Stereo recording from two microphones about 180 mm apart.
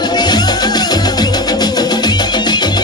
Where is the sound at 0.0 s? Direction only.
25° left (ahead or behind).